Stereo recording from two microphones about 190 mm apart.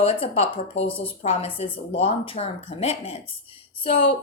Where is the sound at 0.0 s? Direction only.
30° left (ahead or behind).